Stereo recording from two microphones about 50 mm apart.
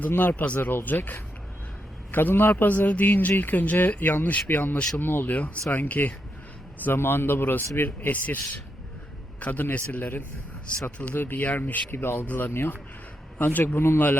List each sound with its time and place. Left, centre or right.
0.2 s a man's voice: left
6.8 s a man's voice: left
7.8 s a man's voice: left
12.5 s a man's voice: left
13.4 s a man's voice: left
13.7 s a man's voice: left